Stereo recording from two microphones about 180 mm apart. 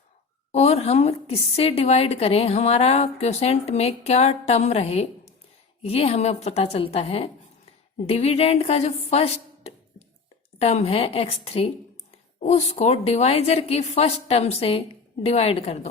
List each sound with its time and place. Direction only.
0.5 s a woman's voice: 35° left (ahead or behind)